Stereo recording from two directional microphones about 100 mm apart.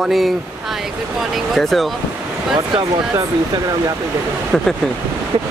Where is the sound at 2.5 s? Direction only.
50° right (ahead or behind).